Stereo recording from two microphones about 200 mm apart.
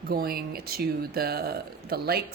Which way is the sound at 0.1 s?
50° right (ahead or behind).